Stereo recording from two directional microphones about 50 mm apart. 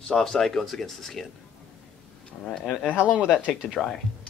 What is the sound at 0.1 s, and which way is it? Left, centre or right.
Speech, centre.